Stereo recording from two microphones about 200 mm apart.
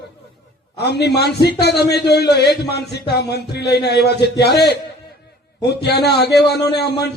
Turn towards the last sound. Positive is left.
turn(degrees=55)  # may be behind; listen again after turning